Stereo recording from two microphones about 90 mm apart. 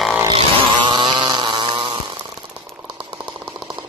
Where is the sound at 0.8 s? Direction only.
60° right (ahead or behind).